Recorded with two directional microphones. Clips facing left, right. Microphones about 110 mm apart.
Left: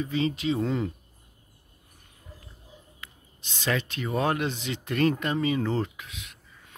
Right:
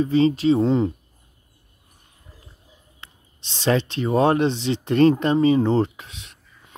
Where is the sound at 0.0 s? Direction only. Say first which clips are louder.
Right 9 dB; 35° right (ahead or behind).